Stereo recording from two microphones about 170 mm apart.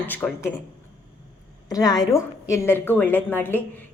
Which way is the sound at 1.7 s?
20° left (ahead or behind).